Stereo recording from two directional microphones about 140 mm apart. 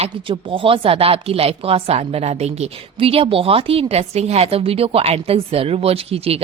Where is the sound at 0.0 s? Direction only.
40° right (ahead or behind).